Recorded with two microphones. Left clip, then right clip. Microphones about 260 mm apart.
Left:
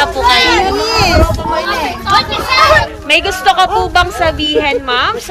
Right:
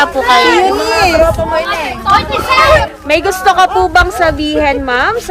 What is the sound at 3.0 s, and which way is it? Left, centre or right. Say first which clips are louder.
A woman's voice: even; right.